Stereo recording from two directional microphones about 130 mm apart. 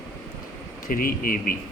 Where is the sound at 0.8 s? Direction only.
90° left.